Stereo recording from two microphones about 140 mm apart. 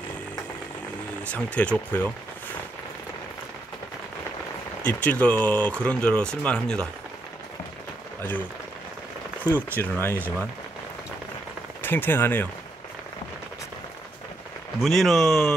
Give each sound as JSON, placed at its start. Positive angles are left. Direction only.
{"t": 1.2, "sound": "speech", "side_deg": 10}
{"t": 4.8, "sound": "speech", "side_deg": 10}
{"t": 8.2, "sound": "speech", "side_deg": 15}
{"t": 9.7, "sound": "speech", "side_deg": 15}
{"t": 11.8, "sound": "speech", "side_deg": 15}
{"t": 14.8, "sound": "a man's voice", "side_deg": 0}